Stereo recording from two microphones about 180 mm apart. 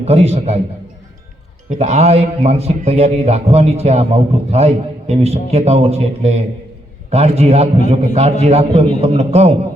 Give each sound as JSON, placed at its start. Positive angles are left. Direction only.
{"t": 0.0, "sound": "a man's voice", "side_deg": -35}
{"t": 1.7, "sound": "a man's voice", "side_deg": -40}